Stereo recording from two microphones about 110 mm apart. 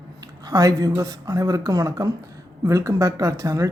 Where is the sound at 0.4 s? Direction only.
35° right (ahead or behind).